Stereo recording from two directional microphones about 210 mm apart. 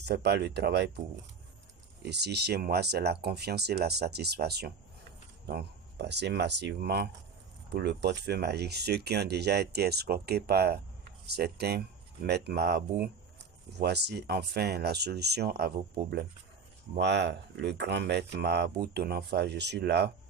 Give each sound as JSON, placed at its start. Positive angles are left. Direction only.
{"t": 0.0, "sound": "speech", "side_deg": -50}
{"t": 2.0, "sound": "speech", "side_deg": -50}